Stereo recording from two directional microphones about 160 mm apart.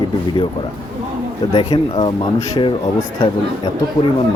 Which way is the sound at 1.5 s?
30° left (ahead or behind).